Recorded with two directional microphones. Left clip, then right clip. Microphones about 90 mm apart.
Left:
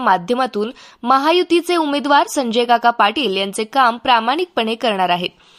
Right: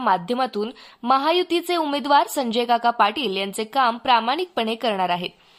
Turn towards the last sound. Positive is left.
turn(degrees=45)  # may be behind; listen again after turning